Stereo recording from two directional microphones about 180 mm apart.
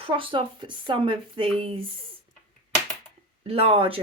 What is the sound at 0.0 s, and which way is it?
Speech, 30° right (ahead or behind).